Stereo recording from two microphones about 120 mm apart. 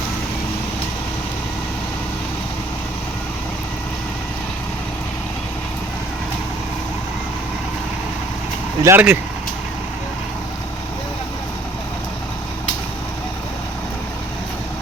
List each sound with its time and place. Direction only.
8.8 s speech: 15° right (ahead or behind)